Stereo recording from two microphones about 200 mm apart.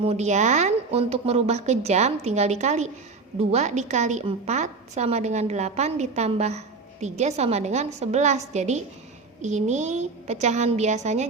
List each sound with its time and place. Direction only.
0.0 s a woman's voice: 30° right (ahead or behind)